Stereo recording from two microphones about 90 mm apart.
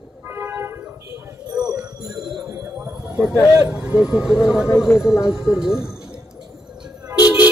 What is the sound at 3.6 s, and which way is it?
Speech, 20° right (ahead or behind).